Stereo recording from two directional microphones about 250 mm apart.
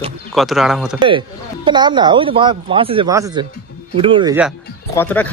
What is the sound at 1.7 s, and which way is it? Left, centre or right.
Speech, centre.